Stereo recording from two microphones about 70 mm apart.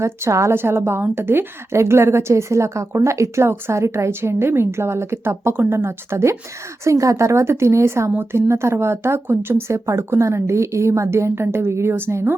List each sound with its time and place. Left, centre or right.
0.0 s speech: right
6.8 s speech: right
8.1 s speech: right